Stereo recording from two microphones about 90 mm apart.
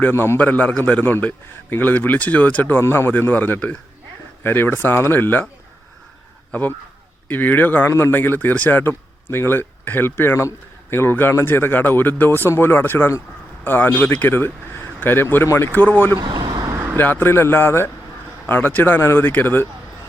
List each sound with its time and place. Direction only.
0.0 s a man's voice: 25° left (ahead or behind)
6.5 s speech: 20° left (ahead or behind)
16.2 s vehicle: 55° right (ahead or behind)
16.7 s vehicle: 30° right (ahead or behind)
17.0 s speech: 20° left (ahead or behind)